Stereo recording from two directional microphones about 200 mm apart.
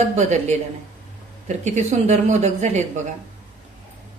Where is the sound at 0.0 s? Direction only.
35° right (ahead or behind).